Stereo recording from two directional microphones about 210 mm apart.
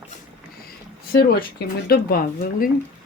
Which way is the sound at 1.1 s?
45° left (ahead or behind).